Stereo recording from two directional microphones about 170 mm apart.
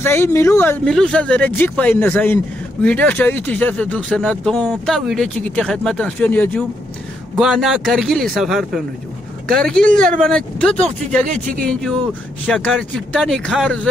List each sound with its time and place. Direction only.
0.0 s speech: 15° left (ahead or behind)
7.3 s speech: centre (ahead or behind)
11.2 s speech: 50° right (ahead or behind)
11.6 s speech: 5° left (ahead or behind)